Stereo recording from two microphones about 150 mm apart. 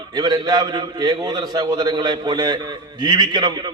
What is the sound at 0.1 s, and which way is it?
A man's voice, 25° right (ahead or behind).